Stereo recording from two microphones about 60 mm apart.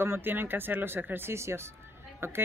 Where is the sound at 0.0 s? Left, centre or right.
Right.